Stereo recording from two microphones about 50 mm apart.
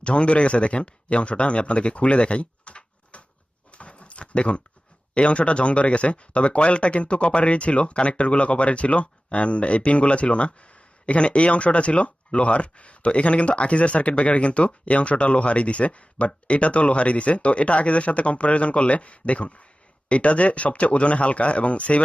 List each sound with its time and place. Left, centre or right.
0.0 s speech: left
3.7 s a sound: left
5.1 s speech: left